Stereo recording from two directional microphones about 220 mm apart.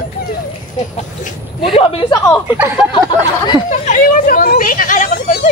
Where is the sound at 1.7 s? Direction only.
25° left (ahead or behind).